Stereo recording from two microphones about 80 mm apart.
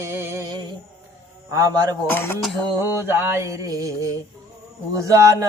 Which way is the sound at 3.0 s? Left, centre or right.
Right.